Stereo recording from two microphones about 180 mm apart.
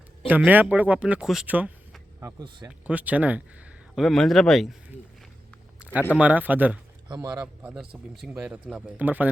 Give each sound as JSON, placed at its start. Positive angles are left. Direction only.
{"t": 0.3, "sound": "speech", "side_deg": -10}
{"t": 2.2, "sound": "speech", "side_deg": -25}
{"t": 2.6, "sound": "speech", "side_deg": -10}
{"t": 5.8, "sound": "a sound", "side_deg": -10}
{"t": 6.1, "sound": "speech", "side_deg": -10}
{"t": 7.4, "sound": "speech", "side_deg": -5}